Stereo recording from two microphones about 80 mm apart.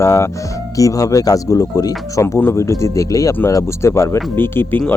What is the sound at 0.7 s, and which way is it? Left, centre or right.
Speech, left.